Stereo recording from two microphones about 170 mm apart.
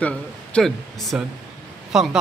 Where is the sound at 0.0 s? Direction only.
5° left (ahead or behind).